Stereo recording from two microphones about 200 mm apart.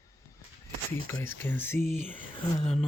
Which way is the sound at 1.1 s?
10° left (ahead or behind).